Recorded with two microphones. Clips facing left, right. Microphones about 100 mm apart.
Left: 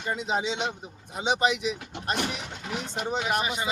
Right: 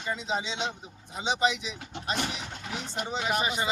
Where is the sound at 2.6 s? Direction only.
75° left (ahead or behind).